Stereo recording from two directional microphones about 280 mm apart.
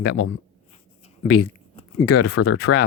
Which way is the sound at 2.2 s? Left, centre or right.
Left.